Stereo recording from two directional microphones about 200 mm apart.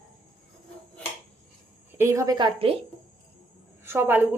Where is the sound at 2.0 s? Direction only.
15° right (ahead or behind).